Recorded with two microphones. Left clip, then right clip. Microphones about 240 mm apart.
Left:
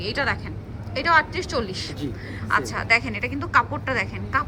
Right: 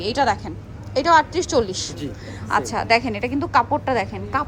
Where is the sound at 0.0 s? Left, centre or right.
Centre.